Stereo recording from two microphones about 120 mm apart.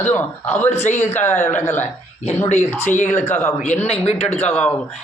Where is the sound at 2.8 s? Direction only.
90° left.